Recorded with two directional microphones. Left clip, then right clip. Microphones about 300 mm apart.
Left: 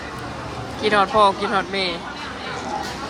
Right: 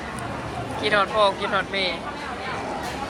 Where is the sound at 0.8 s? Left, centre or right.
Centre.